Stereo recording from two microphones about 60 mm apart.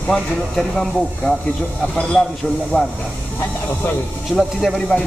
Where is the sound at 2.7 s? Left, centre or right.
Left.